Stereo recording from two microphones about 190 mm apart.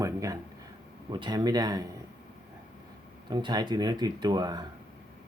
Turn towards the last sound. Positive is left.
turn(degrees=-20)  # may be behind; listen again after turning